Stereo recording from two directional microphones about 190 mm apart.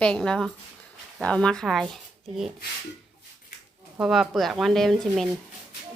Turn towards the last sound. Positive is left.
turn(degrees=0)  # may be behind; listen again after turning